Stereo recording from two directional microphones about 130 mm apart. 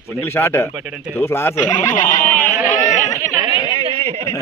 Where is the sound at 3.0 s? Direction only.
20° left (ahead or behind).